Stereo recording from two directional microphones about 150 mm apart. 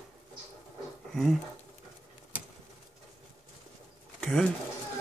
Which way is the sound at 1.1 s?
Centre (ahead or behind).